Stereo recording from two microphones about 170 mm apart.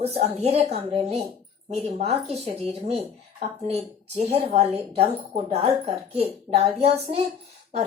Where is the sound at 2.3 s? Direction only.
35° right (ahead or behind).